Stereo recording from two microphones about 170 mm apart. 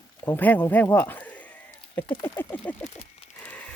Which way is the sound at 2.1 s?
15° left (ahead or behind).